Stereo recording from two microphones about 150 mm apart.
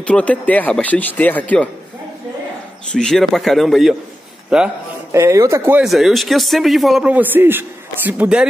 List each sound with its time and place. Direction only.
0.0 s speech: 10° left (ahead or behind)
2.9 s speech: 5° left (ahead or behind)
5.1 s speech: 20° right (ahead or behind)
5.8 s speech: centre (ahead or behind)